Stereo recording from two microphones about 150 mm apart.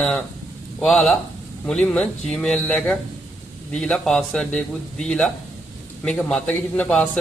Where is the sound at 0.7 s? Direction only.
Centre (ahead or behind).